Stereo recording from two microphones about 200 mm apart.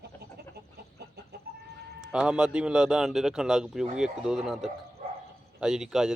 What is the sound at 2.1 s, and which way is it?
A man's voice, 5° right (ahead or behind).